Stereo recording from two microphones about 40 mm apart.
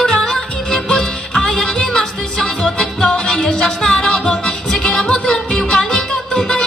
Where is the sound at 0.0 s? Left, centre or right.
Left.